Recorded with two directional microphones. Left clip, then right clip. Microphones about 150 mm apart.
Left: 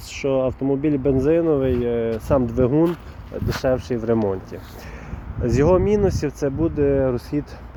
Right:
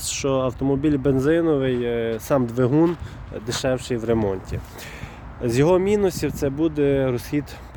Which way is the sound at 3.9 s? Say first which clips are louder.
Left 1 dB; 20° right (ahead or behind).